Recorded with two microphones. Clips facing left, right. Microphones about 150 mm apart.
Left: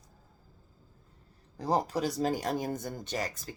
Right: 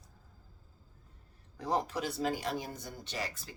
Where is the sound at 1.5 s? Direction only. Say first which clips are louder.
Left 4 dB; 35° left (ahead or behind).